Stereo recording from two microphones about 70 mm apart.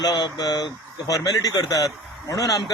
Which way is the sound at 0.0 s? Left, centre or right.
Left.